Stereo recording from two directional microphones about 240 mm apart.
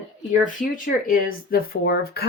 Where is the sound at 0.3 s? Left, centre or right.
Left.